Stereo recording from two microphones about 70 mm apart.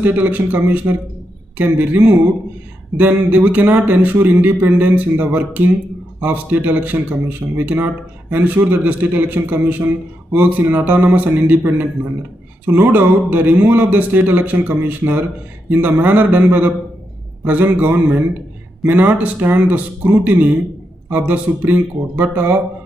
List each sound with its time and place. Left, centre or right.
0.0 s speech: right
17.7 s speech: right